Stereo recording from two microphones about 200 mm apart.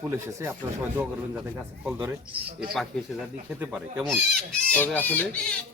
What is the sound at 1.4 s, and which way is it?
Speech, centre (ahead or behind).